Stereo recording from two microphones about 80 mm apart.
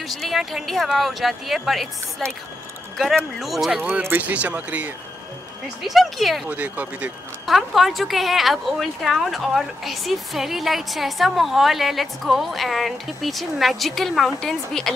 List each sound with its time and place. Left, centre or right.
0.1 s speech: centre
4.0 s speech: right
5.9 s speech: centre
6.4 s speech: centre
7.4 s speech: centre